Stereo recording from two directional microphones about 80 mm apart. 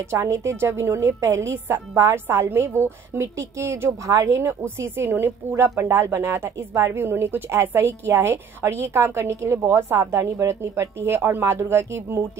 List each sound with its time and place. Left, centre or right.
0.0 s speech: right